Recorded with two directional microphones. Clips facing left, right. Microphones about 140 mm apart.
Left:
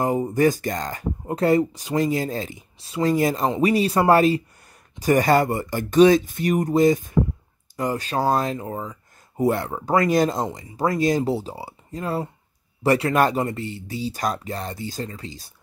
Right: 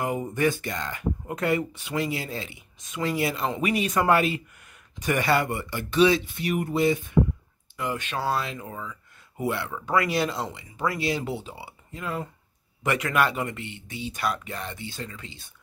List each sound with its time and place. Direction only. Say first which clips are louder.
0.0 s speech: left 6 dB; 35° left (ahead or behind)